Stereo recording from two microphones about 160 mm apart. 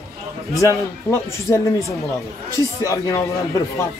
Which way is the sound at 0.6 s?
20° left (ahead or behind).